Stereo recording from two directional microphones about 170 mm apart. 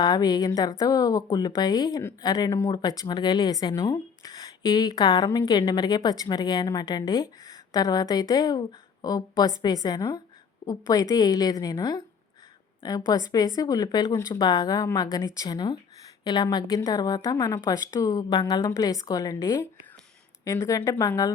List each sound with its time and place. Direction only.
0.0 s a woman's voice: 25° left (ahead or behind)